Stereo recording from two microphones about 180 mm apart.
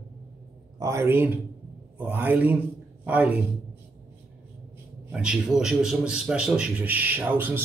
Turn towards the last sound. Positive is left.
turn(degrees=-10)  # may be behind; listen again after turning